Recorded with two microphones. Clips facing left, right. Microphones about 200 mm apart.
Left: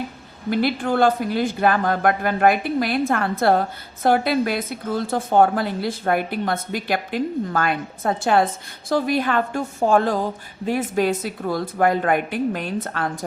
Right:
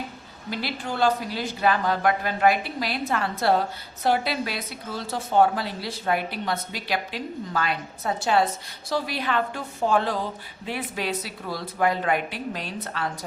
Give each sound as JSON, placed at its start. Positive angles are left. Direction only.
{"t": 0.5, "sound": "a woman's voice", "side_deg": 55}